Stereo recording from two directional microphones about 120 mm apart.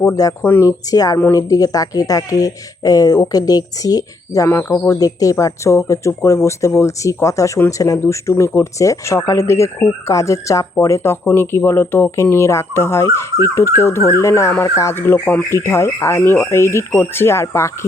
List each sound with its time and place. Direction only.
0.1 s speech: 30° left (ahead or behind)
0.4 s speech: 15° left (ahead or behind)
0.9 s speech: 30° left (ahead or behind)
4.4 s speech: 20° left (ahead or behind)